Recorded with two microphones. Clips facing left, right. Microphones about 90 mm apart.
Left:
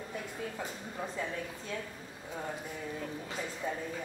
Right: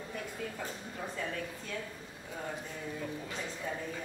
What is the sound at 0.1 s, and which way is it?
A woman's voice, 15° left (ahead or behind).